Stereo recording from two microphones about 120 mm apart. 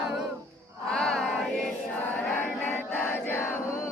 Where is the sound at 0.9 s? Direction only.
5° left (ahead or behind).